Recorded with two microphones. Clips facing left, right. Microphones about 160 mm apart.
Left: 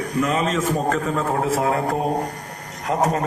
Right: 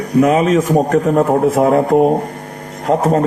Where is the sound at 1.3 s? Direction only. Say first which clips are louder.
Right 9 dB; 40° right (ahead or behind).